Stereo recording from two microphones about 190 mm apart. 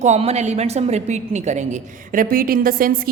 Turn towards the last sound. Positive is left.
turn(degrees=-50)  # may be behind; listen again after turning